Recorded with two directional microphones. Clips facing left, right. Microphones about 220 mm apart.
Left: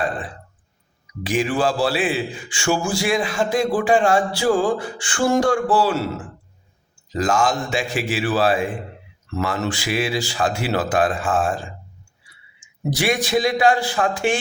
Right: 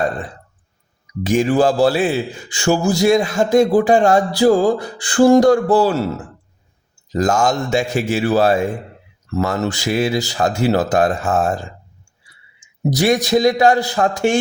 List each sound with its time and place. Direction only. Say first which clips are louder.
1.2 s a man's voice: right 6 dB; 40° right (ahead or behind)